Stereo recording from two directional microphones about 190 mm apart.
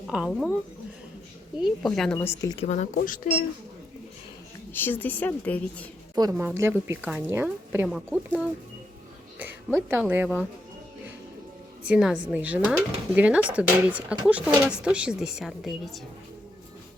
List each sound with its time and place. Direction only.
0.1 s speech: centre (ahead or behind)
1.5 s speech: centre (ahead or behind)
2.1 s a woman's voice: 15° left (ahead or behind)
2.6 s speech: 40° left (ahead or behind)
4.7 s a woman's voice: 10° left (ahead or behind)
6.1 s a woman's voice: 15° right (ahead or behind)
9.4 s speech: 10° right (ahead or behind)
11.9 s a woman's voice: 5° right (ahead or behind)